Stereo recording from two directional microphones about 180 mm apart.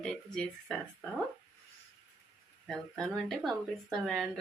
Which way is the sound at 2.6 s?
Centre (ahead or behind).